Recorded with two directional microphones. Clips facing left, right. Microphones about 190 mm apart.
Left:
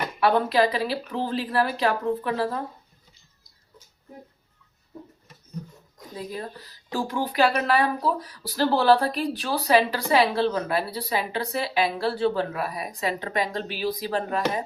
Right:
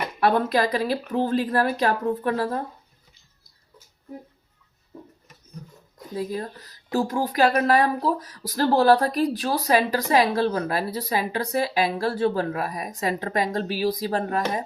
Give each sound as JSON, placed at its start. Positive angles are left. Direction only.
{"t": 0.2, "sound": "speech", "side_deg": -45}
{"t": 6.9, "sound": "speech", "side_deg": -45}